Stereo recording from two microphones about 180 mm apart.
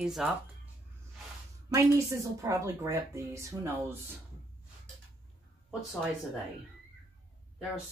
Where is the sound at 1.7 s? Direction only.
15° right (ahead or behind).